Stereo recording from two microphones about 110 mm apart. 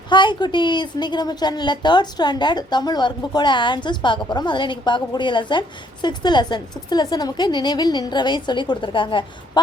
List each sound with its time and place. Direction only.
0.1 s a woman's voice: 45° left (ahead or behind)